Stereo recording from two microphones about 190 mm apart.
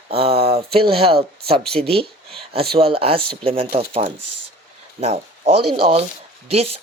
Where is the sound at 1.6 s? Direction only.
5° left (ahead or behind).